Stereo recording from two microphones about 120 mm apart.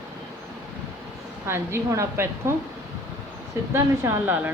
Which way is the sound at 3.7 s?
25° right (ahead or behind).